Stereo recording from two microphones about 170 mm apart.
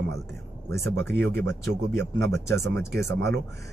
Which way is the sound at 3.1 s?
80° right.